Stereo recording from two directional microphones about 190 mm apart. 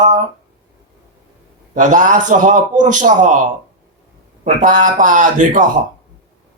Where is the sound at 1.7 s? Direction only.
45° right (ahead or behind).